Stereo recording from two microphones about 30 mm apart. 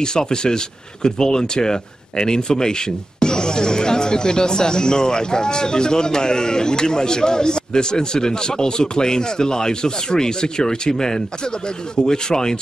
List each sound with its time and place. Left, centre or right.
0.0 s speech: left